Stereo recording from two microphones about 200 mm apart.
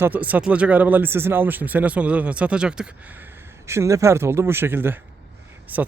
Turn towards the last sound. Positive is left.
turn(degrees=-10)  # may be behind; listen again after turning